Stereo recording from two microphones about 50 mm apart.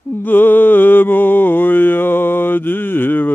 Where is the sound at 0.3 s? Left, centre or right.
Left.